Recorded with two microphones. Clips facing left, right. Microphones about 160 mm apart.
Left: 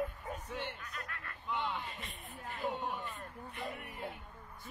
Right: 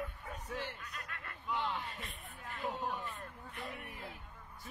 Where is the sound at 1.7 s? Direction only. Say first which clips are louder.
Even; centre (ahead or behind).